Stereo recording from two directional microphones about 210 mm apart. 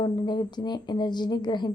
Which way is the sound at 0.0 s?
20° left (ahead or behind).